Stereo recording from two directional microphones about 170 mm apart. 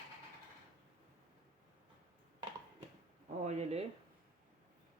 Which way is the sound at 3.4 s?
40° right (ahead or behind).